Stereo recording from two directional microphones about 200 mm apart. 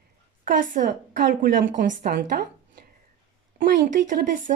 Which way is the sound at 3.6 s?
45° right (ahead or behind).